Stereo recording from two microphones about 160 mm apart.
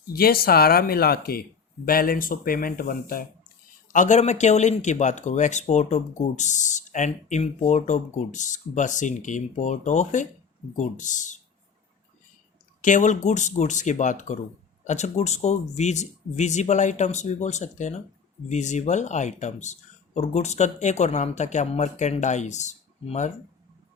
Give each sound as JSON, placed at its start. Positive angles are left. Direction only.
{"t": 0.1, "sound": "speech", "side_deg": 70}
{"t": 3.8, "sound": "speech", "side_deg": 50}
{"t": 12.8, "sound": "speech", "side_deg": 50}